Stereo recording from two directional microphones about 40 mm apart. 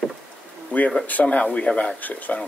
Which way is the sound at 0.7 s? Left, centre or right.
Left.